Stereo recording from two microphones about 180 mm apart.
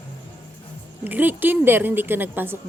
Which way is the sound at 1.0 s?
10° right (ahead or behind).